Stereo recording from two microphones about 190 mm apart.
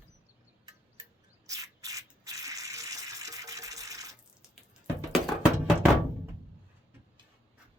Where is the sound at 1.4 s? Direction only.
20° right (ahead or behind).